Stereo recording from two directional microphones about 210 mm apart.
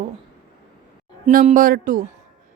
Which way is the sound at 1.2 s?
35° right (ahead or behind).